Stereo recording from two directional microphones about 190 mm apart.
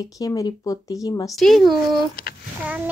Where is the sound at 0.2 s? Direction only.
20° left (ahead or behind).